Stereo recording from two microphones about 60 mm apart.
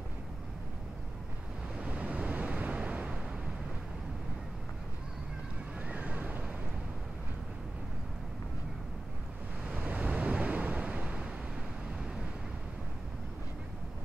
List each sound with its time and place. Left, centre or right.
1.8 s waves: right
5.8 s vehicle: right
9.7 s waves: right